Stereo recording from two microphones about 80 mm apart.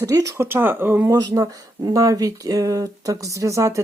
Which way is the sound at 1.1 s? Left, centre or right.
Right.